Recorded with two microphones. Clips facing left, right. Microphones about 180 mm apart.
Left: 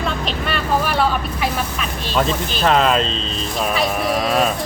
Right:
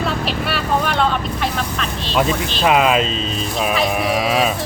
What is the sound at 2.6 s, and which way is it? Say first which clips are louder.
Speech: right 1 dB; 10° right (ahead or behind).